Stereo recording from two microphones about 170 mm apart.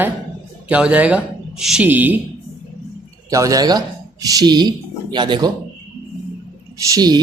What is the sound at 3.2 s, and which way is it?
Speech, 20° right (ahead or behind).